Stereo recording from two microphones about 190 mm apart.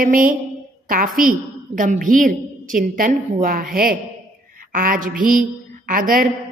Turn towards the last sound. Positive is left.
turn(degrees=-45)  # may be behind; listen again after turning